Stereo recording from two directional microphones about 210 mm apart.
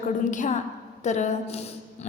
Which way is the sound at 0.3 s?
35° left (ahead or behind).